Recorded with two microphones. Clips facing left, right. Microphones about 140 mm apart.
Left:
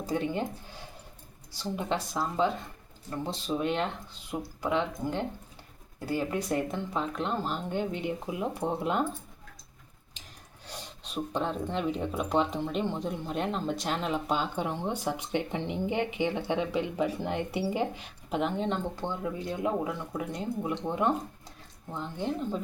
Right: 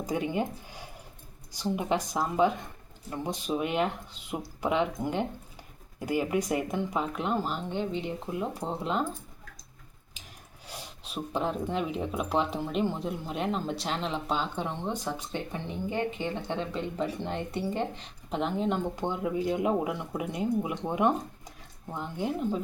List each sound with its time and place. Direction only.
0.0 s speech: 15° right (ahead or behind)
7.7 s speech: 5° left (ahead or behind)
10.7 s speech: 10° right (ahead or behind)
18.9 s speech: 15° right (ahead or behind)